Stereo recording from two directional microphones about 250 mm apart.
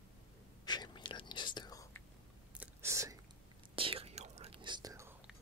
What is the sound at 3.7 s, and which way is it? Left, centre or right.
Whispering, right.